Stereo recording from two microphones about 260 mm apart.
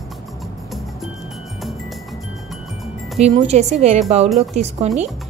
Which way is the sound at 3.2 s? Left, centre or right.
Right.